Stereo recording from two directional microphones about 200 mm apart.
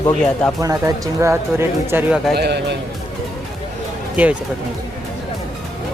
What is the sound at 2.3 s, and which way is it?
Speech, 55° right (ahead or behind).